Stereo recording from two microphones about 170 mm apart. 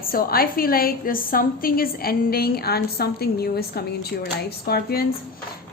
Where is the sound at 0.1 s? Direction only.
60° left (ahead or behind).